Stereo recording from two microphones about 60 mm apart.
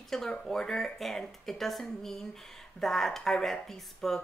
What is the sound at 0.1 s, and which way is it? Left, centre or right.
Speech, centre.